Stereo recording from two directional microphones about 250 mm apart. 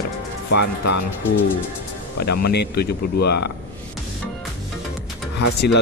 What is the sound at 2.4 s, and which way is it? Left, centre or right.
Speech, left.